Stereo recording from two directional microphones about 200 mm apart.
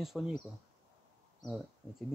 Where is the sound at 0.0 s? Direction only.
Centre (ahead or behind).